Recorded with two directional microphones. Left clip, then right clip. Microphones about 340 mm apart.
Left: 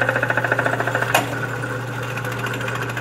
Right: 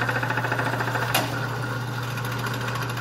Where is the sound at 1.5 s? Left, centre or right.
Centre.